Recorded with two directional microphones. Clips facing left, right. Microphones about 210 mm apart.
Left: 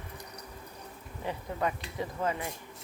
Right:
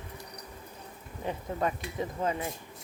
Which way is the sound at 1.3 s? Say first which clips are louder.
Right 1 dB; 20° right (ahead or behind).